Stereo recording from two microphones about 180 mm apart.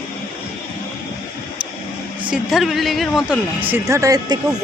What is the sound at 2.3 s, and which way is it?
A woman's voice, centre (ahead or behind).